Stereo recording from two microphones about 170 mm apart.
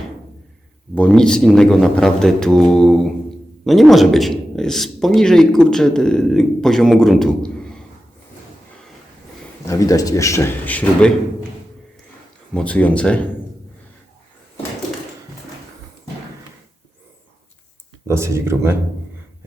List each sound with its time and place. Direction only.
0.9 s speech: 5° left (ahead or behind)
9.6 s a man's voice: 20° left (ahead or behind)
12.5 s a man's voice: 5° left (ahead or behind)
18.1 s speech: 15° right (ahead or behind)